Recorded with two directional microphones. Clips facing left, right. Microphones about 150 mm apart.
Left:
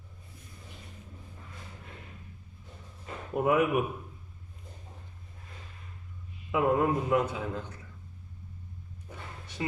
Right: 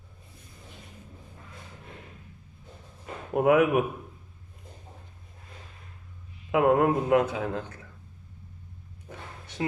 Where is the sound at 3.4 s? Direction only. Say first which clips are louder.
Right 5 dB; 65° right (ahead or behind).